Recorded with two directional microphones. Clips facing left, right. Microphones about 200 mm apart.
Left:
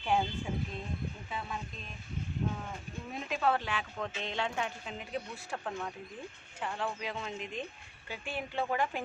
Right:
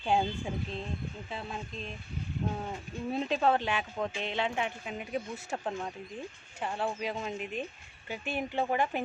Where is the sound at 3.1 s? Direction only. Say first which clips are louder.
Right 4 dB; 30° right (ahead or behind).